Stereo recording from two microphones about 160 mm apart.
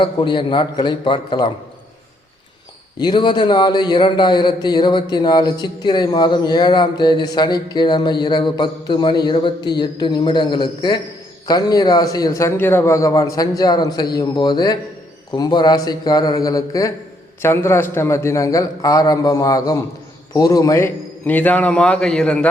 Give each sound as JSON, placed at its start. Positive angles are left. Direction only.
{"t": 0.0, "sound": "speech", "side_deg": 30}
{"t": 3.0, "sound": "a man's voice", "side_deg": 30}